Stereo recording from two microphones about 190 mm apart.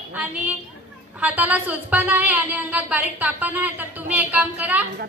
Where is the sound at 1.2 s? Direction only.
10° right (ahead or behind).